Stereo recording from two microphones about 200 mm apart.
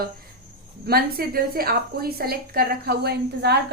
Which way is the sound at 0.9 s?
50° right (ahead or behind).